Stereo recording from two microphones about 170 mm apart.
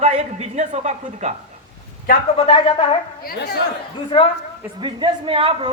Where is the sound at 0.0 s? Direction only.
40° right (ahead or behind).